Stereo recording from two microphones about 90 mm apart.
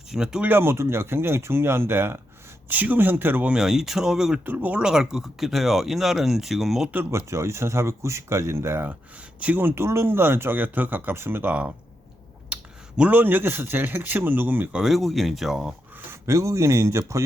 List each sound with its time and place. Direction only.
0.1 s speech: 5° right (ahead or behind)
0.4 s speech: 25° right (ahead or behind)
3.5 s speech: 5° right (ahead or behind)
4.4 s speech: 20° right (ahead or behind)
4.8 s speech: 5° right (ahead or behind)
6.9 s speech: 30° right (ahead or behind)
12.5 s a sound: 10° right (ahead or behind)
13.0 s speech: 20° right (ahead or behind)
14.7 s speech: 5° right (ahead or behind)
16.2 s speech: 35° right (ahead or behind)